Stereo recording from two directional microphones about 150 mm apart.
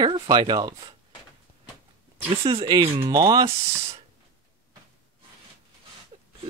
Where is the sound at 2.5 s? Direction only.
30° right (ahead or behind).